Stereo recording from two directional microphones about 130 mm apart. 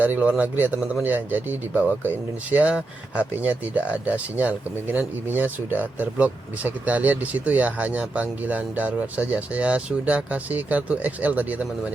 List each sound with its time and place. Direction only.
0.0 s speech: 10° right (ahead or behind)